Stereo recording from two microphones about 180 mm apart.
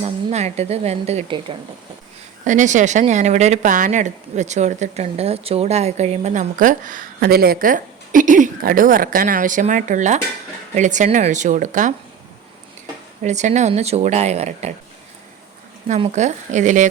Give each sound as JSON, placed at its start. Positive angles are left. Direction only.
{"t": 0.0, "sound": "speech", "side_deg": -35}
{"t": 2.4, "sound": "speech", "side_deg": -45}
{"t": 13.2, "sound": "speech", "side_deg": -40}
{"t": 15.9, "sound": "speech", "side_deg": -35}